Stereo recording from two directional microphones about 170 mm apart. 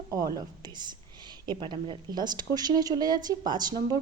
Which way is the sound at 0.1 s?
20° right (ahead or behind).